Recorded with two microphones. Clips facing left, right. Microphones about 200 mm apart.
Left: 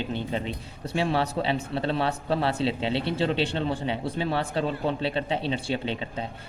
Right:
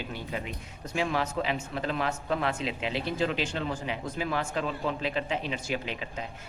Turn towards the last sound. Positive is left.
turn(degrees=30)  # may be behind; listen again after turning